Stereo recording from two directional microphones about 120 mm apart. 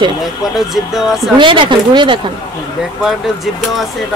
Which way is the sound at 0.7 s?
Centre (ahead or behind).